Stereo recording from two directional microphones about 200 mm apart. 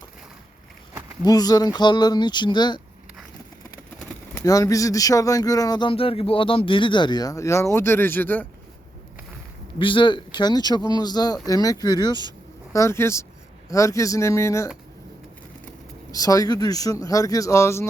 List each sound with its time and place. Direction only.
1.2 s speech: 20° left (ahead or behind)
4.4 s speech: 15° left (ahead or behind)
9.7 s speech: 25° left (ahead or behind)
16.1 s speech: 20° left (ahead or behind)